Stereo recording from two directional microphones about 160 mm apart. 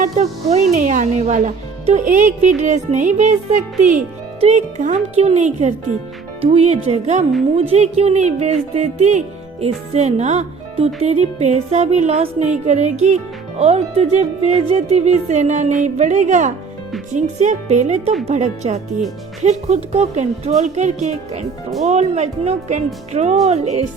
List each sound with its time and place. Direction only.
0.0 s speech: 45° right (ahead or behind)